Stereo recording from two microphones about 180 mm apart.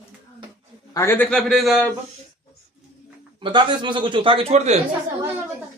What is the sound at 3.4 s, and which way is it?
Speech, 25° right (ahead or behind).